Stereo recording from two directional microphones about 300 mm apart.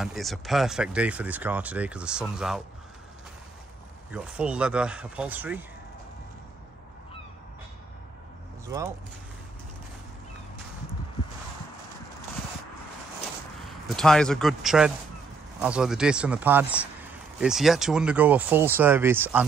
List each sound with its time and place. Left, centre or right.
0.0 s speech: centre
4.1 s speech: centre
8.6 s speech: centre
13.7 s a man's voice: centre